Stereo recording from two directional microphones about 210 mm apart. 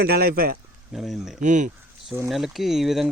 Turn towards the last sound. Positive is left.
turn(degrees=0)  # may be behind; listen again after turning